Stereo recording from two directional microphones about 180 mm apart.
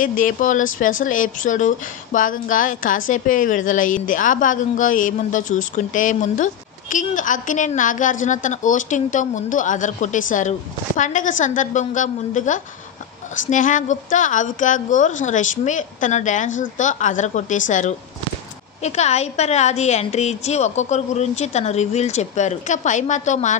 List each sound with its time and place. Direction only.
0.0 s a woman's voice: 50° left (ahead or behind)